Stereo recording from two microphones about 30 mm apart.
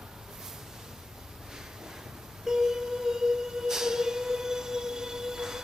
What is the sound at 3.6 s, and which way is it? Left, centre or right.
Music, centre.